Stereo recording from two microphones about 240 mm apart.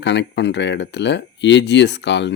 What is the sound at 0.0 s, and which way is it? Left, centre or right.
Speech, left.